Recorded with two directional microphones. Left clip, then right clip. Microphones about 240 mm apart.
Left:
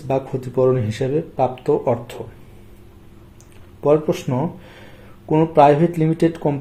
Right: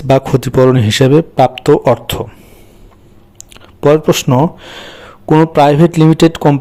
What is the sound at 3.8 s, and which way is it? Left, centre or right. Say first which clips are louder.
Speech: right 8 dB; right.